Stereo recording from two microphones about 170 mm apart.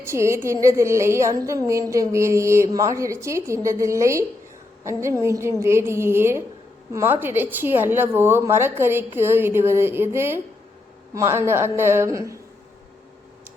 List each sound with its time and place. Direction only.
0.0 s a woman's voice: 15° right (ahead or behind)